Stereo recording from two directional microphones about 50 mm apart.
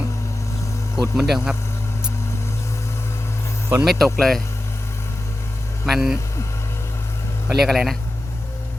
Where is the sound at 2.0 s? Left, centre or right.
Left.